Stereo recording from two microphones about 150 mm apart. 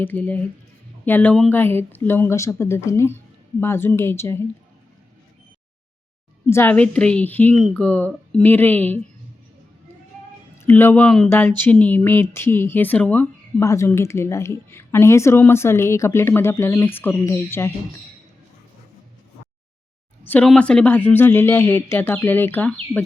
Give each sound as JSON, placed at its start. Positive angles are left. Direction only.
{"t": 0.0, "sound": "speech", "side_deg": 10}
{"t": 6.5, "sound": "speech", "side_deg": 15}
{"t": 10.6, "sound": "speech", "side_deg": 15}
{"t": 20.2, "sound": "speech", "side_deg": 10}